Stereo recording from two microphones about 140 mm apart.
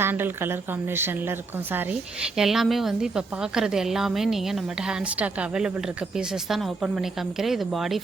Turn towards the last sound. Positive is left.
turn(degrees=0)  # may be behind; listen again after turning